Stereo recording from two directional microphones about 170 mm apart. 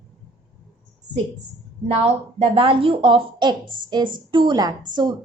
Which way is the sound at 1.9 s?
35° right (ahead or behind).